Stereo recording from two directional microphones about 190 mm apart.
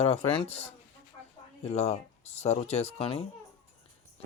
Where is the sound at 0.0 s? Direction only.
35° left (ahead or behind).